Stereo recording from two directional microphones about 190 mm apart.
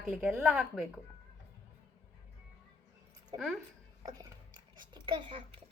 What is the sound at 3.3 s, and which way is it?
Speech, 25° right (ahead or behind).